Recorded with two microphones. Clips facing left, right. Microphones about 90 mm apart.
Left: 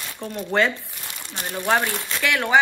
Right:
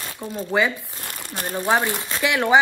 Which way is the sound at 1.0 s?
50° right (ahead or behind).